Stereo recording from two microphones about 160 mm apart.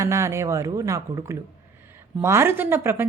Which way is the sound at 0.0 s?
20° right (ahead or behind).